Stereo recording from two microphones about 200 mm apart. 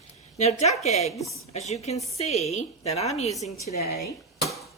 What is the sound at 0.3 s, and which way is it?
A woman's voice, 35° left (ahead or behind).